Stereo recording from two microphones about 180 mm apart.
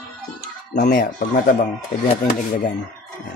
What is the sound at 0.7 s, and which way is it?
Speech, 50° left (ahead or behind).